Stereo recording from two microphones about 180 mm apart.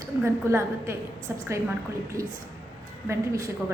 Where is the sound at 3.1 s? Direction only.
15° right (ahead or behind).